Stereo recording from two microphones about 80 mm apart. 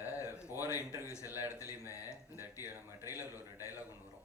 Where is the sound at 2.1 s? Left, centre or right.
Left.